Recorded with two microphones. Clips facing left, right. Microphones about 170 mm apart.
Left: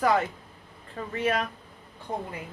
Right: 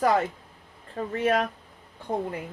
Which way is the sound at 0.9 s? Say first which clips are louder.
Right 3 dB; 45° right (ahead or behind).